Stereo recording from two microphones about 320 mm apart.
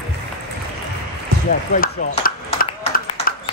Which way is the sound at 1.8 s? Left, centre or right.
Left.